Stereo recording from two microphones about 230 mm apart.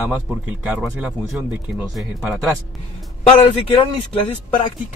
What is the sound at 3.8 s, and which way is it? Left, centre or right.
Speech, left.